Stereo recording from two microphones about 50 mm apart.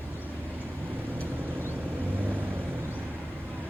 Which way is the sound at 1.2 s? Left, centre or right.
Right.